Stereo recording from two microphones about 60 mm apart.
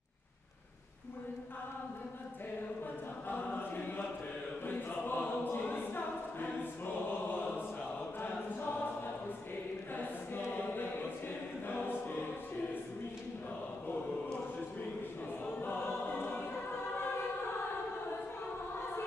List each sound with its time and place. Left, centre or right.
3.3 s choir: left
7.2 s choir: left
10.4 s choir: left
15.4 s choir: left